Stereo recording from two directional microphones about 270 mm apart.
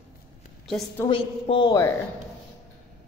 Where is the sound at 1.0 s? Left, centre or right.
Centre.